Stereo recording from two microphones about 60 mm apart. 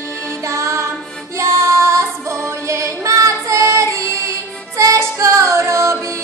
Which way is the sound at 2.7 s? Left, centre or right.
Right.